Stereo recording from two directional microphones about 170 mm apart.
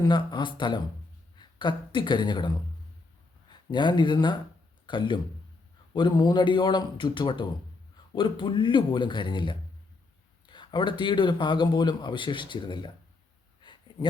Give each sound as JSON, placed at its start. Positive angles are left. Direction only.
{"t": 0.0, "sound": "a man's voice", "side_deg": 25}
{"t": 3.7, "sound": "a man's voice", "side_deg": 25}
{"t": 13.6, "sound": "a sound", "side_deg": 30}